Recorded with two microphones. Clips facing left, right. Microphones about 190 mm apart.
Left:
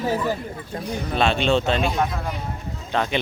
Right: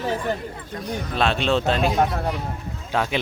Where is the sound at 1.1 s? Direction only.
Centre (ahead or behind).